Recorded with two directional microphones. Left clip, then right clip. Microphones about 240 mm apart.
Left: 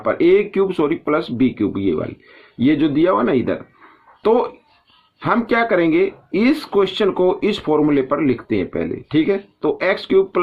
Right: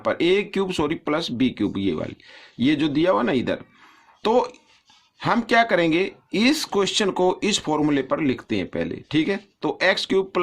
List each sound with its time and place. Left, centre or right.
0.0 s speech: right